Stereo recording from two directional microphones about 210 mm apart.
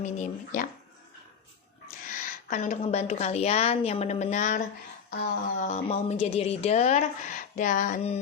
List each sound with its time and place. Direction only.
0.0 s speech: 35° left (ahead or behind)
2.0 s speech: 40° left (ahead or behind)
5.6 s speech: 30° left (ahead or behind)